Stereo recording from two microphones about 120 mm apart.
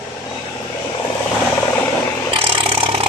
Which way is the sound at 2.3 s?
50° right (ahead or behind).